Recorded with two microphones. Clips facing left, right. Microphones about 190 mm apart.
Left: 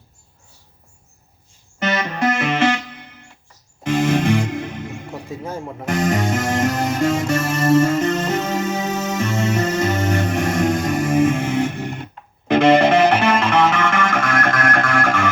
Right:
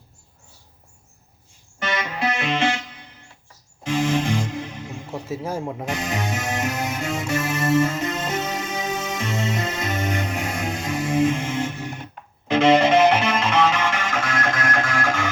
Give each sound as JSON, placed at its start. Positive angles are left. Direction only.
{"t": 2.0, "sound": "music", "side_deg": 50}
{"t": 5.3, "sound": "speech", "side_deg": -10}
{"t": 5.9, "sound": "music", "side_deg": 50}
{"t": 9.9, "sound": "music", "side_deg": 75}
{"t": 10.7, "sound": "music", "side_deg": 55}